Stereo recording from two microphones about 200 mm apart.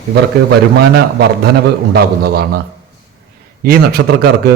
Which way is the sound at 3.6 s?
50° right (ahead or behind).